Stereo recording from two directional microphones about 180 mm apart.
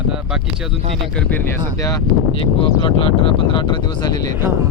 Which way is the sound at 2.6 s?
30° left (ahead or behind).